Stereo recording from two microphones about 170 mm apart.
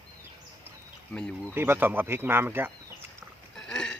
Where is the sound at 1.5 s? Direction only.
15° right (ahead or behind).